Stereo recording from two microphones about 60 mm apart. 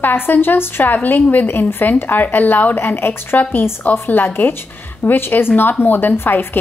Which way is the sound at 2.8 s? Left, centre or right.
Left.